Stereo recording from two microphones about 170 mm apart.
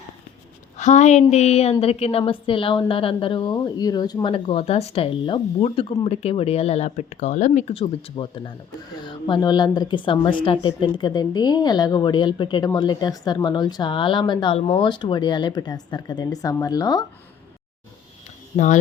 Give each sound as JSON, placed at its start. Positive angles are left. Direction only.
{"t": 0.8, "sound": "a sound", "side_deg": 45}
{"t": 1.8, "sound": "a woman's voice", "side_deg": 35}
{"t": 18.5, "sound": "speech", "side_deg": 45}